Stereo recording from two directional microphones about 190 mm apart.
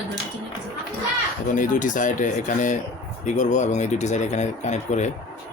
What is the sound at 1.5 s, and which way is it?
Speech, 45° left (ahead or behind).